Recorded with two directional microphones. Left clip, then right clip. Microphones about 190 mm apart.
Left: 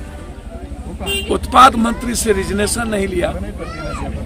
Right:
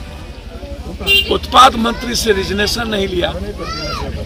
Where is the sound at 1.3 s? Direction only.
20° left (ahead or behind).